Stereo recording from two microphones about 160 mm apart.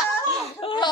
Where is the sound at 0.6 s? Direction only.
30° left (ahead or behind).